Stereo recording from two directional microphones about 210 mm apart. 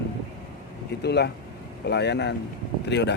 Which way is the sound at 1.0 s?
50° left (ahead or behind).